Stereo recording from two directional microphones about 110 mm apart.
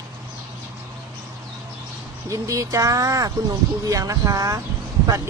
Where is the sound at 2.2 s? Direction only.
30° right (ahead or behind).